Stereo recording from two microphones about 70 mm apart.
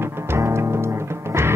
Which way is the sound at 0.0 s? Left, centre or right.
Right.